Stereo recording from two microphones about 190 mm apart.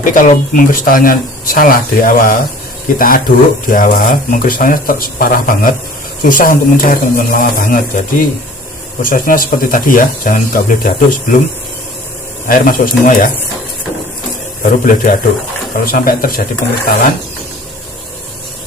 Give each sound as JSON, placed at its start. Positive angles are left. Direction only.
{"t": 0.0, "sound": "speech", "side_deg": 45}
{"t": 9.0, "sound": "speech", "side_deg": 45}
{"t": 12.5, "sound": "speech", "side_deg": 50}
{"t": 14.6, "sound": "speech", "side_deg": 45}